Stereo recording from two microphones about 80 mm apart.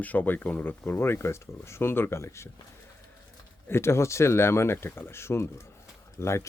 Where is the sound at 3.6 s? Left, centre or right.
Left.